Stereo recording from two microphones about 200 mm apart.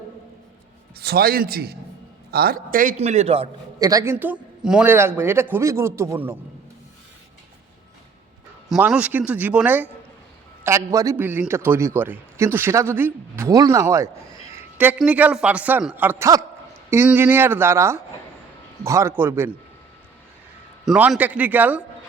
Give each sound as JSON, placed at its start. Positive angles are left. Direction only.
{"t": 0.9, "sound": "a man's voice", "side_deg": -50}
{"t": 3.0, "sound": "a man's voice", "side_deg": -30}
{"t": 3.8, "sound": "a man's voice", "side_deg": -15}
{"t": 8.7, "sound": "a man's voice", "side_deg": -5}
{"t": 20.8, "sound": "a man's voice", "side_deg": -5}